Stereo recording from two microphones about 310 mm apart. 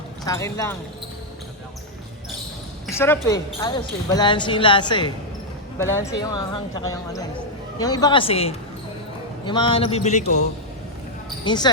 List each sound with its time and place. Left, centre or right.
0.3 s speech: centre
2.8 s speech: centre
11.4 s speech: centre